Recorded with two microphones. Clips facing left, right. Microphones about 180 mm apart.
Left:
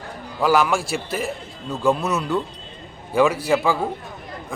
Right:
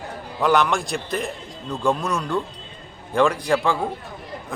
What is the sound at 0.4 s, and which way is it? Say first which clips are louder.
A man's voice: left 1 dB; 5° left (ahead or behind).